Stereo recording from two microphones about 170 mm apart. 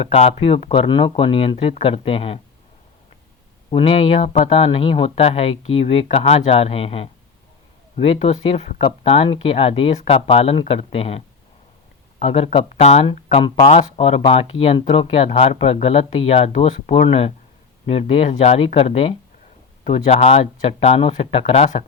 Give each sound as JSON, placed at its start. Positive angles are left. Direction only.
{"t": 0.0, "sound": "speech", "side_deg": 35}
{"t": 3.7, "sound": "speech", "side_deg": 30}
{"t": 12.2, "sound": "speech", "side_deg": 40}